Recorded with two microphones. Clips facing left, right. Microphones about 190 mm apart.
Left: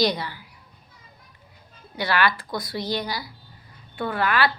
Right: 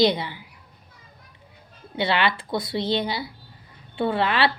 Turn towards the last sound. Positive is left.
turn(degrees=-25)  # may be behind; listen again after turning